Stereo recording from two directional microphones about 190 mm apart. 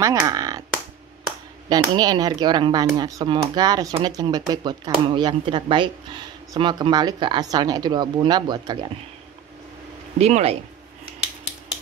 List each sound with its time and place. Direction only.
0.0 s speech: 15° right (ahead or behind)
1.7 s speech: 20° right (ahead or behind)
10.1 s speech: 35° right (ahead or behind)